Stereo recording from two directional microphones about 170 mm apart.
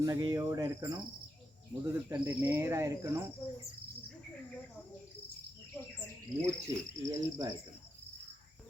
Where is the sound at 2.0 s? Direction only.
15° right (ahead or behind).